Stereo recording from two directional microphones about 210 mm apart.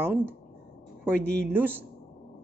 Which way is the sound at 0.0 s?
10° right (ahead or behind).